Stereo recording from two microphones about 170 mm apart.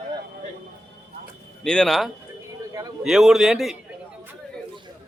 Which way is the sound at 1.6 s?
5° left (ahead or behind).